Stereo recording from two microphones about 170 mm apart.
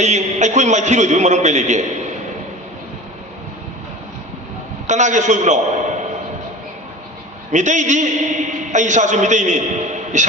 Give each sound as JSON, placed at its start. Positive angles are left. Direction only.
{"t": 0.0, "sound": "a man's voice", "side_deg": -45}
{"t": 4.9, "sound": "a man's voice", "side_deg": -45}
{"t": 7.5, "sound": "a man's voice", "side_deg": -45}